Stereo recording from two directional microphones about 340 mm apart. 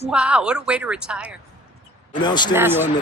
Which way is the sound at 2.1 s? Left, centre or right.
Centre.